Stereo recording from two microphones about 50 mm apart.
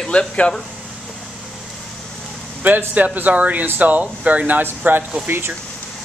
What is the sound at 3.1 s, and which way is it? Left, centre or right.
Speech, right.